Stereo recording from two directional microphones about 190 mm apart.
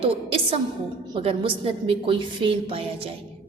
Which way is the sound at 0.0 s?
30° right (ahead or behind).